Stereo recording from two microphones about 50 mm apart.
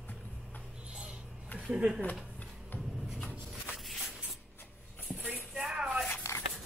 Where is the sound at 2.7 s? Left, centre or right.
Left.